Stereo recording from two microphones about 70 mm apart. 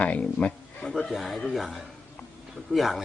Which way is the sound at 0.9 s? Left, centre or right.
Centre.